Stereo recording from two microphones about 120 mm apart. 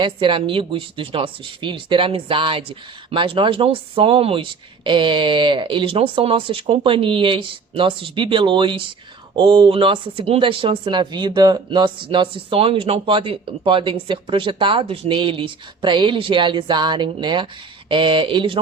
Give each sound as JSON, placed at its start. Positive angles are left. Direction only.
{"t": 0.0, "sound": "speech", "side_deg": -45}